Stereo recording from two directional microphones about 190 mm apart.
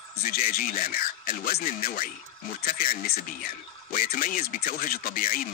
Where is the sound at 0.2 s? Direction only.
50° left (ahead or behind).